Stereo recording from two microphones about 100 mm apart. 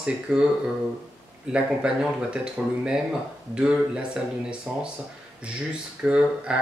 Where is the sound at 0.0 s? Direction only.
10° right (ahead or behind).